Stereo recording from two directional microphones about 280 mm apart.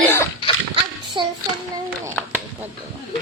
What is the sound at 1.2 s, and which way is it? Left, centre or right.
Child singing, centre.